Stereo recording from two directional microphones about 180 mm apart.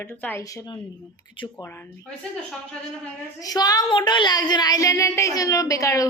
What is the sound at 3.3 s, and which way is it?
A woman's voice, 20° left (ahead or behind).